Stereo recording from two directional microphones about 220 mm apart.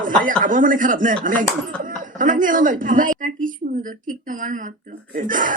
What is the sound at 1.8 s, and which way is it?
A woman's voice, 35° right (ahead or behind).